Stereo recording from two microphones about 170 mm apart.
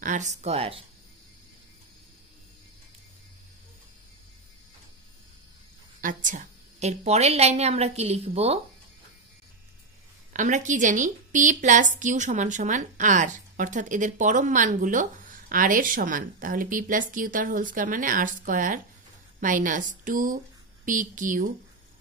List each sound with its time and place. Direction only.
0.0 s a woman's voice: 45° right (ahead or behind)
5.9 s a woman's voice: 50° right (ahead or behind)
10.3 s a woman's voice: 45° right (ahead or behind)